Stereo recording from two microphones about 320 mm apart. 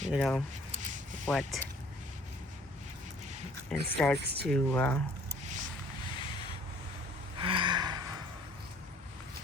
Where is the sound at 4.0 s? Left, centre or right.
Centre.